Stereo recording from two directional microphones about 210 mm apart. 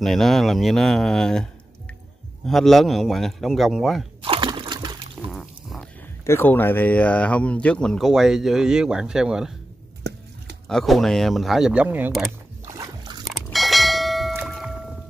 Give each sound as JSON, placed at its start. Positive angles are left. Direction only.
{"t": 0.0, "sound": "speech", "side_deg": 0}
{"t": 4.2, "sound": "a sound", "side_deg": -25}
{"t": 5.1, "sound": "a sound", "side_deg": 0}
{"t": 6.2, "sound": "speech", "side_deg": 10}
{"t": 10.7, "sound": "speech", "side_deg": 0}
{"t": 12.6, "sound": "dog", "side_deg": -15}
{"t": 13.3, "sound": "bell", "side_deg": 0}
{"t": 14.3, "sound": "boat", "side_deg": -5}